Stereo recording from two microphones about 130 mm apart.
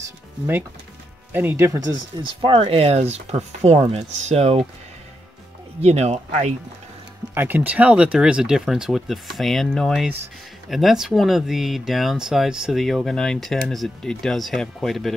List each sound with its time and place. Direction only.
1.3 s speech: 15° right (ahead or behind)
2.2 s speech: 40° right (ahead or behind)
5.8 s speech: 55° right (ahead or behind)
7.3 s speech: 15° right (ahead or behind); by 15.1 s centre (ahead or behind)